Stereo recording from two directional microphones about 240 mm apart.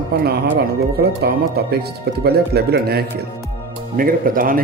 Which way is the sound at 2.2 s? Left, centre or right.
Right.